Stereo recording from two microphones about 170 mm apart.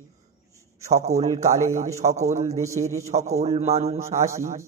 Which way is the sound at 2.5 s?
20° right (ahead or behind).